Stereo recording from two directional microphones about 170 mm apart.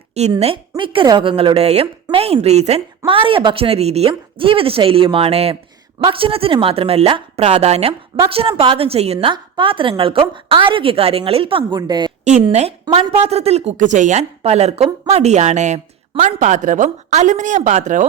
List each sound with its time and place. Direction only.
0.1 s a woman's voice: 40° right (ahead or behind)
12.5 s a woman's voice: 40° right (ahead or behind)